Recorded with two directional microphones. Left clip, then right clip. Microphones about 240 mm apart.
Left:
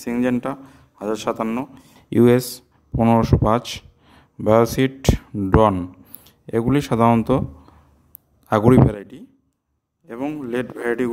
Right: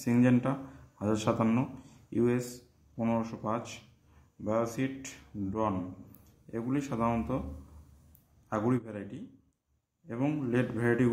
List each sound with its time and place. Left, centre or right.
0.0 s a man's voice: left
8.5 s speech: left